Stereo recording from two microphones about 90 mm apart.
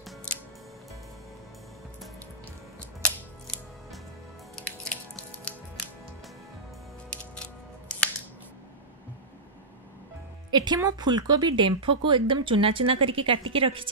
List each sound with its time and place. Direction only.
3.0 s music: 5° left (ahead or behind)
7.1 s music: 10° left (ahead or behind)
10.5 s speech: 50° right (ahead or behind); by 13.8 s 90° right